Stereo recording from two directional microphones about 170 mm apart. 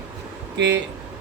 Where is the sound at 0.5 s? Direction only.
90° right.